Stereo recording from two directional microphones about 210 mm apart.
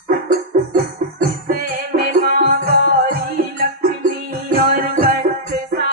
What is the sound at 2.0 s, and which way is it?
Music, 45° right (ahead or behind).